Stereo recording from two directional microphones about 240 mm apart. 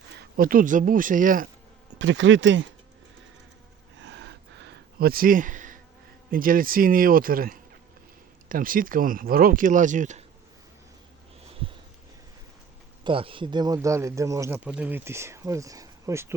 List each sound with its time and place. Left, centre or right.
0.2 s speech: right
2.0 s speech: right
4.0 s a sound: right
6.3 s speech: right
13.1 s speech: right